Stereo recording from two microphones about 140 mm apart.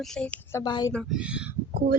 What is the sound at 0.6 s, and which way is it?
Speech, 30° left (ahead or behind).